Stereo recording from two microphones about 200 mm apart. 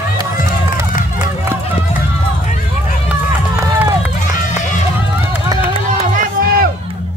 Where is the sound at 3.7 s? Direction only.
15° right (ahead or behind).